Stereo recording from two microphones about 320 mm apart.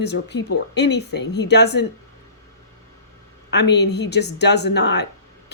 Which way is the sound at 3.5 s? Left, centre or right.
Left.